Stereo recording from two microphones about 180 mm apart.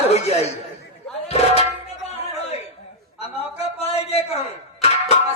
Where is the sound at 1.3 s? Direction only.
35° left (ahead or behind).